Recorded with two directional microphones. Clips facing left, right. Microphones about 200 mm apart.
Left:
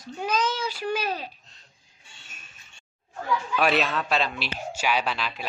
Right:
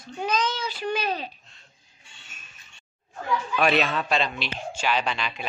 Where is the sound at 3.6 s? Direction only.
Centre (ahead or behind).